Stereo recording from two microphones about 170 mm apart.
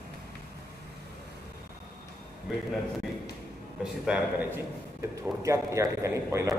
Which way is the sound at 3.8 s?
5° right (ahead or behind).